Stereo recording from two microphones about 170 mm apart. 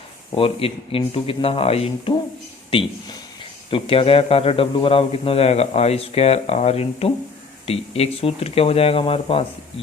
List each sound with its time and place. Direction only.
0.3 s a man's voice: 35° left (ahead or behind)